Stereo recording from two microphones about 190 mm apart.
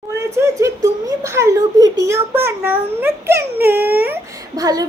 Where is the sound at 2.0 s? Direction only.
15° right (ahead or behind).